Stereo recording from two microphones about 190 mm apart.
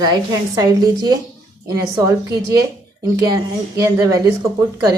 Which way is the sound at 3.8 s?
15° right (ahead or behind).